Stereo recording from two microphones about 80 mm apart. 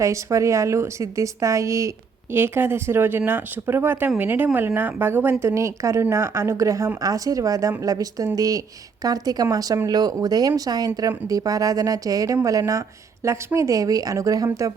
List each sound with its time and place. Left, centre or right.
0.0 s speech: right
2.3 s speech: right